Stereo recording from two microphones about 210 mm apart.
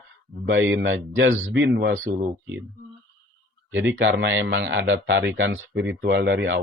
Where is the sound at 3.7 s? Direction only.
60° right (ahead or behind).